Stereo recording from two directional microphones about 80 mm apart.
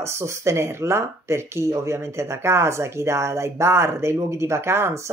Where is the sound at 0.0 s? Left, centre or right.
Right.